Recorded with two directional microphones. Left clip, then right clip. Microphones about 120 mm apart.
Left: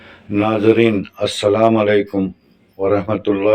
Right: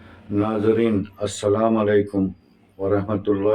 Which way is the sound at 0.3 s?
30° left (ahead or behind).